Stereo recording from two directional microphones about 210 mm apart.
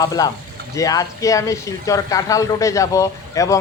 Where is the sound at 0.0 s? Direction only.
15° left (ahead or behind).